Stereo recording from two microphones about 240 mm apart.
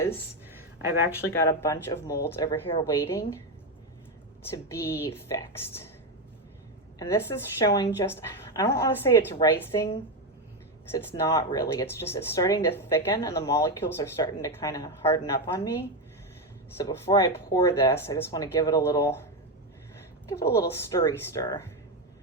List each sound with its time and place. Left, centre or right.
0.5 s a sound: centre
1.2 s speech: centre
2.6 s a woman's voice: left
2.9 s speech: centre
4.5 s speech: centre
7.0 s speech: centre
16.7 s speech: centre
20.3 s speech: centre